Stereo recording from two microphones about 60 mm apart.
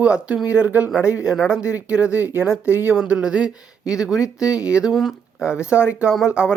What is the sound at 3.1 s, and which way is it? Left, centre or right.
Speech, centre.